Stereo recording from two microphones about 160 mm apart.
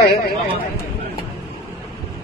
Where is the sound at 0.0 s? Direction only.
90° left.